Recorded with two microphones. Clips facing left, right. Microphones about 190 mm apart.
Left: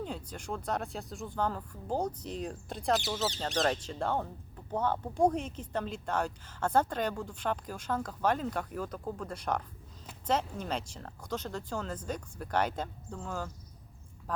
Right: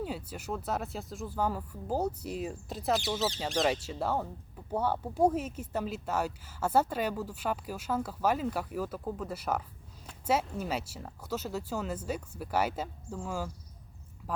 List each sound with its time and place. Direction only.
0.0 s speech: 5° right (ahead or behind)